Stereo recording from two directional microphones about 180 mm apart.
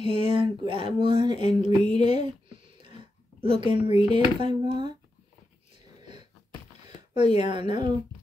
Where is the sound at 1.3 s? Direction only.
35° left (ahead or behind).